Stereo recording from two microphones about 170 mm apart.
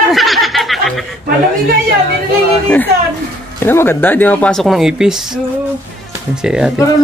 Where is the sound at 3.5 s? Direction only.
15° left (ahead or behind); by 6.7 s 5° right (ahead or behind).